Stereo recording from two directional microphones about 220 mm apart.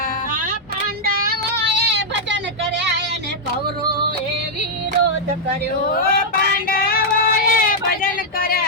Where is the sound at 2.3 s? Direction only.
50° right (ahead or behind).